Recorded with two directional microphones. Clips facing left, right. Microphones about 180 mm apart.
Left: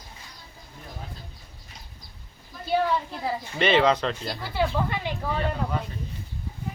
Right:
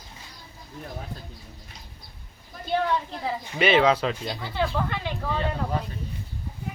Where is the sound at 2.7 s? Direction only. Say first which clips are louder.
Left 1 dB; 5° left (ahead or behind).